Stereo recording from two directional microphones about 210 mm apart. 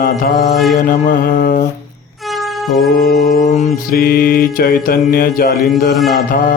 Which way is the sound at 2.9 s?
45° left (ahead or behind).